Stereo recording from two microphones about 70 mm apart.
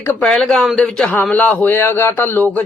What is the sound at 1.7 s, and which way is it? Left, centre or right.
Speech, left.